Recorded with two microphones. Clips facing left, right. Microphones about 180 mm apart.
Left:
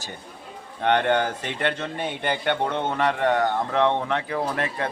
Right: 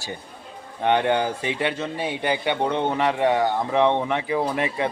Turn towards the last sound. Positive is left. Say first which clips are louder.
# right 3 dB
turn(degrees=-15)  # may be behind; listen again after turning